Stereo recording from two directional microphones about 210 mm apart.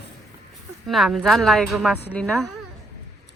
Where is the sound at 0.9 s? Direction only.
Centre (ahead or behind).